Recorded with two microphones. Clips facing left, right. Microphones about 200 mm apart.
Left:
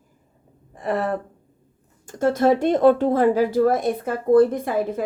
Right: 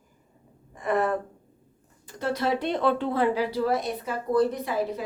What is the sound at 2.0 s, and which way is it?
A woman's voice, 45° left (ahead or behind).